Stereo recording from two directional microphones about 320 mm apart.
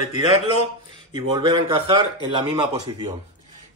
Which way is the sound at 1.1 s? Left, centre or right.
Centre.